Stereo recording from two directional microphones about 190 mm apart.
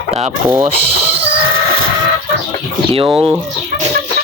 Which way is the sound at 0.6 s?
30° right (ahead or behind).